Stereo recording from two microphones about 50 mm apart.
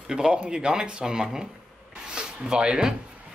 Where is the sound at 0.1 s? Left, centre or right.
Centre.